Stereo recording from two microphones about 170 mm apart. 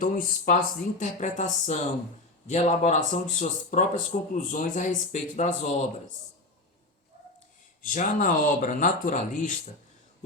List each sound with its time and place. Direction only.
0.0 s speech: 50° left (ahead or behind)
7.8 s speech: 50° left (ahead or behind)